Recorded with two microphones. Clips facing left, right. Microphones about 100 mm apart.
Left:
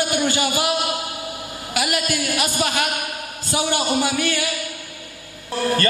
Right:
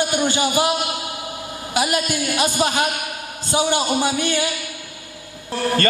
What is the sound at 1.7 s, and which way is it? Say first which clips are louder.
A man's voice: right 2 dB; 25° right (ahead or behind).